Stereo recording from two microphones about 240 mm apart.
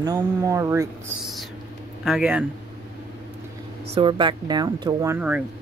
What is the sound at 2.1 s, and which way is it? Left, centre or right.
Speech, centre.